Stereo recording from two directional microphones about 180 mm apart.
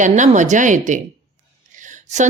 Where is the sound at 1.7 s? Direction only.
45° right (ahead or behind).